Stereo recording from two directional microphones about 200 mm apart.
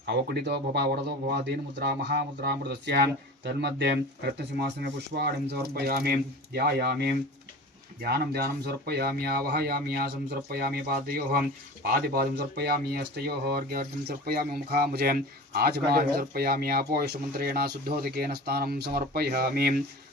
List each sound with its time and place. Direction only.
0.0 s speech: 55° right (ahead or behind)